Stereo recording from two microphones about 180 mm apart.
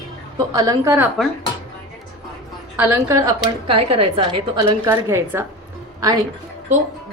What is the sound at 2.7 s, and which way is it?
Speech, 10° right (ahead or behind).